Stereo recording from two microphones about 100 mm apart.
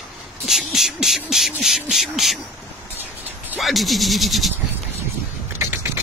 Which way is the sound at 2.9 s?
20° right (ahead or behind).